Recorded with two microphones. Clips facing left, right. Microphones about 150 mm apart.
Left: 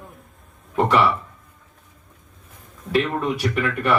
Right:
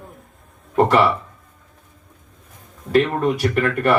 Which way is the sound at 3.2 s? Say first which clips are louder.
Right 4 dB; 50° right (ahead or behind).